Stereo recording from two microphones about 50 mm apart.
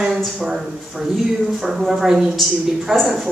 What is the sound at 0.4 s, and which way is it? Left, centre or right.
A woman's voice, centre.